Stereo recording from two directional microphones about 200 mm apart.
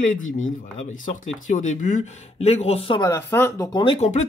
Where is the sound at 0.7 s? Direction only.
40° left (ahead or behind).